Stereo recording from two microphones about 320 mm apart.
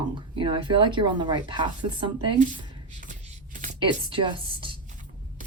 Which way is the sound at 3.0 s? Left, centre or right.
Right.